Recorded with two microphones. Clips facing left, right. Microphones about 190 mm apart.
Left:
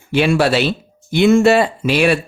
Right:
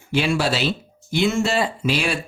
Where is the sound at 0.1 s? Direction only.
65° left (ahead or behind).